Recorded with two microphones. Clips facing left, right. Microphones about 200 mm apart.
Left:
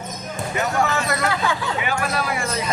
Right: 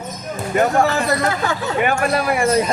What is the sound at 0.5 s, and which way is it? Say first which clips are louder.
Speech: right 8 dB; 50° right (ahead or behind).